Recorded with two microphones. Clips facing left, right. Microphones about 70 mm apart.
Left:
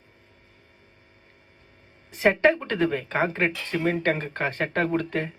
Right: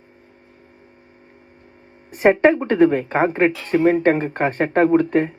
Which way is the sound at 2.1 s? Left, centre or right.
Right.